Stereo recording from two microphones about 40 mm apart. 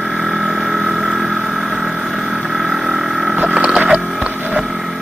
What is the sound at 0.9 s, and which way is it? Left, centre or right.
Vehicle, centre.